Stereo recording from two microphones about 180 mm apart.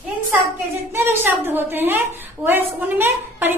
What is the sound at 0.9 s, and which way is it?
A woman's voice, 10° right (ahead or behind).